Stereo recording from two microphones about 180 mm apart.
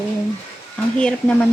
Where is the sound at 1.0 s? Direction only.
5° left (ahead or behind).